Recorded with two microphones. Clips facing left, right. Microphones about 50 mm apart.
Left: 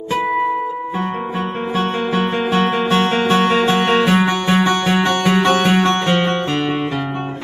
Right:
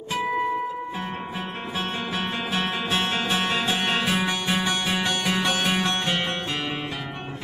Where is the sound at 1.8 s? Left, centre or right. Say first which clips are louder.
Left 10 dB; left.